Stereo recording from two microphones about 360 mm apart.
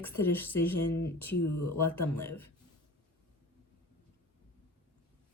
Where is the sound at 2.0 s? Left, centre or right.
Centre.